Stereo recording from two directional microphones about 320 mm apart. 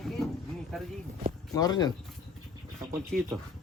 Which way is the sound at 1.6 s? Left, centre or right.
Centre.